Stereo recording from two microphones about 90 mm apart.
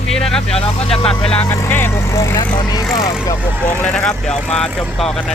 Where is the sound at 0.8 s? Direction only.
90° left.